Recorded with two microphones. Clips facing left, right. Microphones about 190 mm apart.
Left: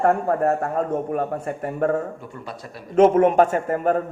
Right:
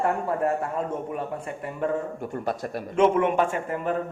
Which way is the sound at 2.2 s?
50° right (ahead or behind).